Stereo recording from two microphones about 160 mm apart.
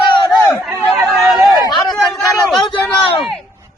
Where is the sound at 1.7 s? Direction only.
Centre (ahead or behind).